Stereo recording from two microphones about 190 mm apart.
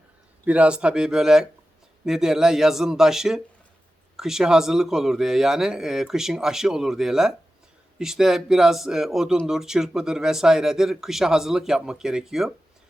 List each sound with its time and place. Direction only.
0.4 s speech: 5° right (ahead or behind)